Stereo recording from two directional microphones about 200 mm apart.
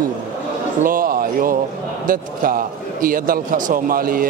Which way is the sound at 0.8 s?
45° right (ahead or behind).